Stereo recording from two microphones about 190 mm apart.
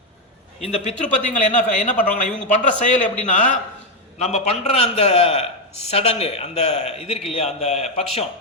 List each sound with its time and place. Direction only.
0.6 s a man's voice: 35° left (ahead or behind)